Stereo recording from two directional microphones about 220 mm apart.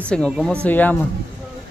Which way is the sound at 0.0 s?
5° left (ahead or behind).